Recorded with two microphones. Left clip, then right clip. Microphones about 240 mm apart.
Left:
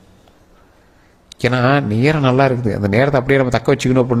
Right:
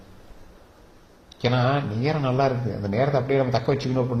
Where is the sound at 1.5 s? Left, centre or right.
Left.